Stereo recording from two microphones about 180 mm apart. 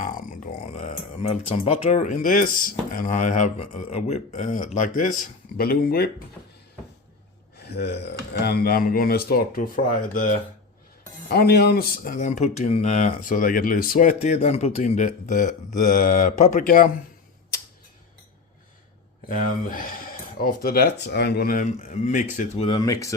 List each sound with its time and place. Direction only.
0.0 s a sound: 45° left (ahead or behind)
0.8 s speech: 35° left (ahead or behind); by 6.1 s 55° left (ahead or behind)
7.5 s speech: 65° left (ahead or behind); by 10.3 s 50° left (ahead or behind)
11.3 s speech: 60° left (ahead or behind)
19.3 s speech: 45° left (ahead or behind)
22.8 s speech: 20° left (ahead or behind)